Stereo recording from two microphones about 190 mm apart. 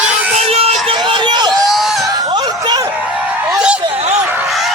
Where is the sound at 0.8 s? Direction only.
25° right (ahead or behind).